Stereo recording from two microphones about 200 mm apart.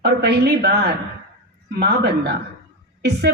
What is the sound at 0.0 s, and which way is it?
Speech, 55° right (ahead or behind).